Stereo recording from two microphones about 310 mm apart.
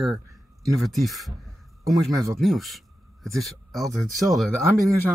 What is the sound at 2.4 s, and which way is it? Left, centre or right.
Speech, centre.